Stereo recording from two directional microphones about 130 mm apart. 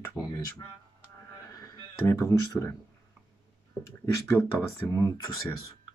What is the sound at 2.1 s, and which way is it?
Speech, 20° left (ahead or behind).